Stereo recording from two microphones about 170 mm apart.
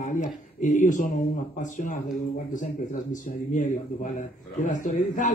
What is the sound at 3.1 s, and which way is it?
A man's voice, 50° left (ahead or behind).